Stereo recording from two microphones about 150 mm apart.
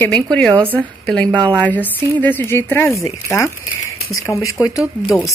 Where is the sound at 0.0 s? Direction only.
10° left (ahead or behind); by 5.1 s 25° left (ahead or behind).